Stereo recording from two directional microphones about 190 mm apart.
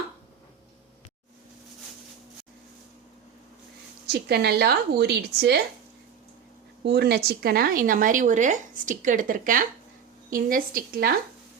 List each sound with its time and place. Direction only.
4.0 s speech: 60° right (ahead or behind)
6.8 s speech: 60° right (ahead or behind)